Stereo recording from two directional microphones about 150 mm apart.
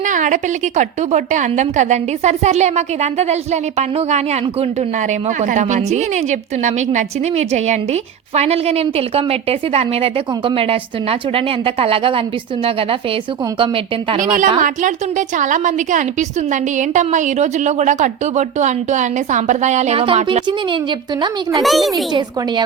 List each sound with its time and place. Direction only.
0.0 s a woman's voice: 60° right (ahead or behind); by 12.2 s 40° right (ahead or behind)
13.6 s a woman's voice: 35° right (ahead or behind)
14.2 s a woman's voice: 60° right (ahead or behind); by 20.4 s 40° right (ahead or behind)
21.6 s a child's voice: centre (ahead or behind)